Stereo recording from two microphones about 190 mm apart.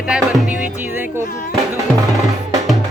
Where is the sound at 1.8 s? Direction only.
15° right (ahead or behind).